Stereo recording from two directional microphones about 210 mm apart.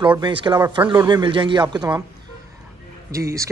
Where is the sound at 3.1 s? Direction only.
15° right (ahead or behind).